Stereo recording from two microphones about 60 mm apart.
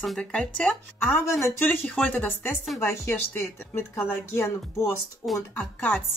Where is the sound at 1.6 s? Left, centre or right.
Left.